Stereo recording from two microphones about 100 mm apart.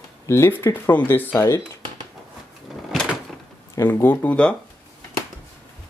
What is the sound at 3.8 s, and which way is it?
Speech, 25° left (ahead or behind).